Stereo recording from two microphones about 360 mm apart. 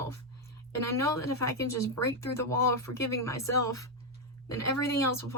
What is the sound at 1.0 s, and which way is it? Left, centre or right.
Speech, centre.